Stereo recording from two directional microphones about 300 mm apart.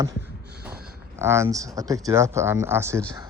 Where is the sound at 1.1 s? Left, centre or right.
Centre.